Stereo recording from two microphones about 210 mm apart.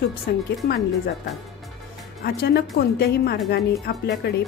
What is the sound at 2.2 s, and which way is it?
A woman's voice, 50° left (ahead or behind).